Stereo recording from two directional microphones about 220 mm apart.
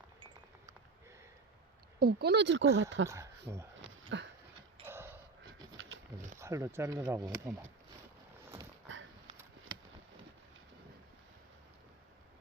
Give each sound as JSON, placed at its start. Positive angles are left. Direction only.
{"t": 2.0, "sound": "speech", "side_deg": -45}
{"t": 3.1, "sound": "speech", "side_deg": -15}
{"t": 4.1, "sound": "speech", "side_deg": -55}
{"t": 4.9, "sound": "creak", "side_deg": -10}
{"t": 6.4, "sound": "speech", "side_deg": -15}
{"t": 8.9, "sound": "a sound", "side_deg": -60}